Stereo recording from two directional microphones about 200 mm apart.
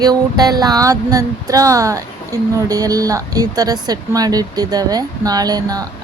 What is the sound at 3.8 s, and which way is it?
Speech, 20° right (ahead or behind).